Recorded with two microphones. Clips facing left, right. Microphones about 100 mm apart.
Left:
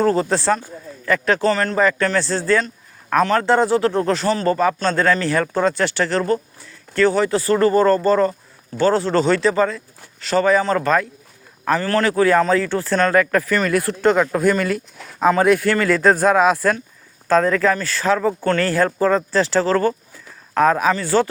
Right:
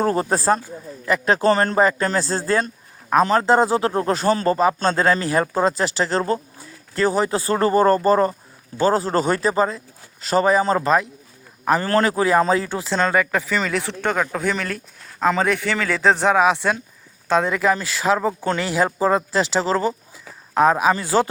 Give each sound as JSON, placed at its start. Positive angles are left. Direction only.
{"t": 0.2, "sound": "speech", "side_deg": -40}
{"t": 1.0, "sound": "speech", "side_deg": -25}
{"t": 3.1, "sound": "speech", "side_deg": -25}
{"t": 3.7, "sound": "speech", "side_deg": -20}
{"t": 3.9, "sound": "speech", "side_deg": -30}
{"t": 17.3, "sound": "speech", "side_deg": -10}
{"t": 19.5, "sound": "speech", "side_deg": -25}
{"t": 20.1, "sound": "a sound", "side_deg": -15}